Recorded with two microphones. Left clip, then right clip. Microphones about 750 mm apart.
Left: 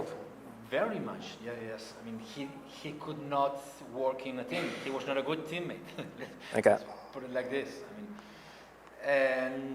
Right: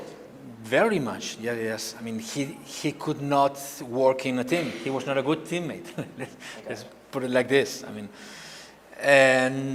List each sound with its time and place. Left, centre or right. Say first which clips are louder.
0.7 s speech: right 10 dB; right
6.6 s a man's voice: left 14 dB; left
7.1 s a man's voice: right 13 dB; right
9.0 s a man's voice: right 11 dB; right